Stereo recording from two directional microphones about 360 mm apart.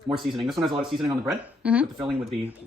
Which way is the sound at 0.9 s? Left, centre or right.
Centre.